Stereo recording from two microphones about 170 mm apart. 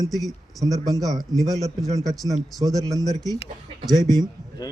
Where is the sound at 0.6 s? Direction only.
20° right (ahead or behind).